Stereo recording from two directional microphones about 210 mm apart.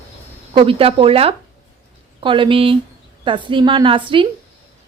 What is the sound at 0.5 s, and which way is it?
A woman's voice, 25° right (ahead or behind).